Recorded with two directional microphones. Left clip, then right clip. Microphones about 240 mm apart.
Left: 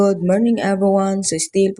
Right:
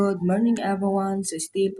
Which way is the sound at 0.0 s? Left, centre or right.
Left.